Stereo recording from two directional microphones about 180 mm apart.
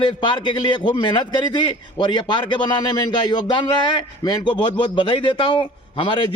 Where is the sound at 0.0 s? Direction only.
25° left (ahead or behind).